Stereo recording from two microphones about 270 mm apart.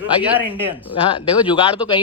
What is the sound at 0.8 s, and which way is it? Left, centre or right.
Speech, centre.